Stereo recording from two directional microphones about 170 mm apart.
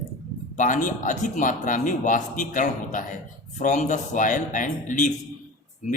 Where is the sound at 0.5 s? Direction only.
50° left (ahead or behind).